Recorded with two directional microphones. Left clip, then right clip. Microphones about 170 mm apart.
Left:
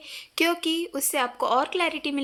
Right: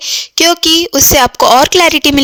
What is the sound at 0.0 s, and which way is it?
A woman's voice, 60° right (ahead or behind).